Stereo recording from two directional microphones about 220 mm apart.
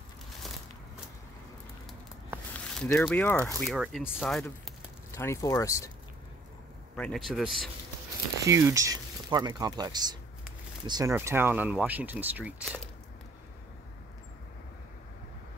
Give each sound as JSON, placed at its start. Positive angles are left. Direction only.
{"t": 1.9, "sound": "a sound", "side_deg": 0}
{"t": 2.9, "sound": "speech", "side_deg": 10}
{"t": 5.1, "sound": "speech", "side_deg": 15}
{"t": 7.0, "sound": "speech", "side_deg": 0}
{"t": 8.5, "sound": "speech", "side_deg": -10}